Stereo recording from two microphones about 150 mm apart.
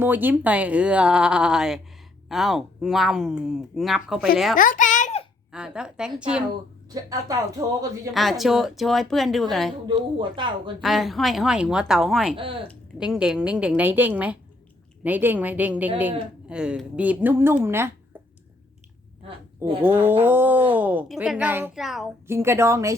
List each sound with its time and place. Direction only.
0.0 s speech: 10° right (ahead or behind)
4.5 s a sound: 65° left (ahead or behind)
5.5 s speech: 5° right (ahead or behind)
6.9 s speech: 25° right (ahead or behind)
8.1 s speech: centre (ahead or behind)
10.2 s speech: 30° right (ahead or behind)
10.8 s speech: centre (ahead or behind)
19.8 s speech: 15° right (ahead or behind)
22.3 s speech: 15° right (ahead or behind)